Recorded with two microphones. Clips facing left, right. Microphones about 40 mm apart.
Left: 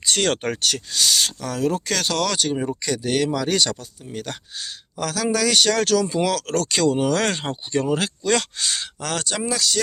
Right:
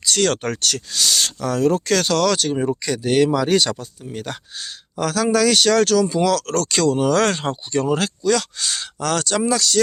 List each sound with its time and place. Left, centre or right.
0.0 s speech: left; by 2.6 s centre
2.6 s speech: centre
8.2 s speech: left
8.6 s speech: centre